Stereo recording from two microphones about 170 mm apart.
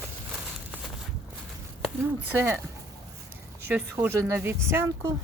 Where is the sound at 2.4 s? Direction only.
15° right (ahead or behind).